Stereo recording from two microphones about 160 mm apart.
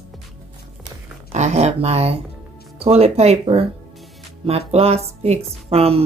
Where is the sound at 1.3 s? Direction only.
45° right (ahead or behind).